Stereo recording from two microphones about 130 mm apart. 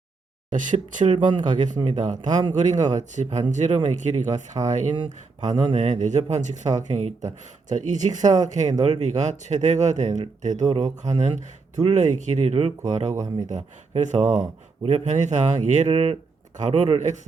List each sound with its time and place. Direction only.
0.5 s speech: 75° right (ahead or behind)
10.7 s speech: 35° right (ahead or behind)
11.1 s speech: 60° right (ahead or behind)
13.1 s speech: 30° right (ahead or behind)
13.5 s speech: 65° right (ahead or behind)